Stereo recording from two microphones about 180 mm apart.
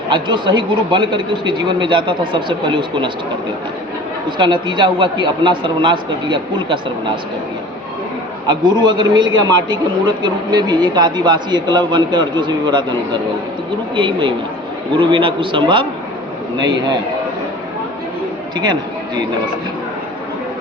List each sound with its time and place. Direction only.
0.1 s a man's voice: 25° right (ahead or behind)
4.4 s a man's voice: 25° right (ahead or behind)
8.4 s a man's voice: 25° right (ahead or behind)
13.9 s a man's voice: 25° right (ahead or behind)
18.5 s a man's voice: 25° right (ahead or behind)